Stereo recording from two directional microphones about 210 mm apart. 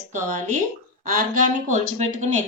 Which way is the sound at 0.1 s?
35° right (ahead or behind).